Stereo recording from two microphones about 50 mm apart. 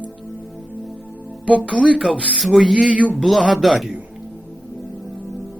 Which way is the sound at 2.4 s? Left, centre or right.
Centre.